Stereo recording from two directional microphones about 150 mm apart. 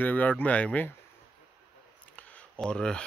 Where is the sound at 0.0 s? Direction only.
10° left (ahead or behind).